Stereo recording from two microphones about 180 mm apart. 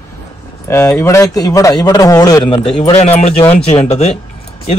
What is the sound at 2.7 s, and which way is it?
Speech, 35° left (ahead or behind).